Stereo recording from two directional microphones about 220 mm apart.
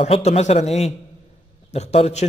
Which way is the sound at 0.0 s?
30° left (ahead or behind).